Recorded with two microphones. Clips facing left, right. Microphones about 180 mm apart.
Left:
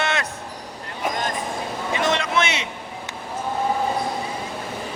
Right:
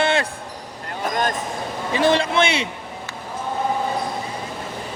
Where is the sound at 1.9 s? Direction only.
30° right (ahead or behind).